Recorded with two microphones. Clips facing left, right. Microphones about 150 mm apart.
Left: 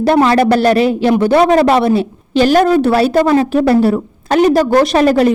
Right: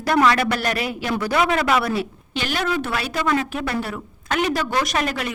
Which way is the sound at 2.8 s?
35° left (ahead or behind).